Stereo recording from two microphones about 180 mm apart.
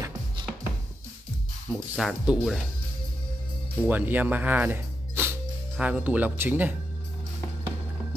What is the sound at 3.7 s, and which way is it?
Speech, 10° right (ahead or behind).